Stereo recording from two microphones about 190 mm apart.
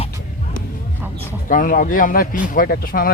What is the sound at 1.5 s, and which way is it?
Speech, 45° left (ahead or behind).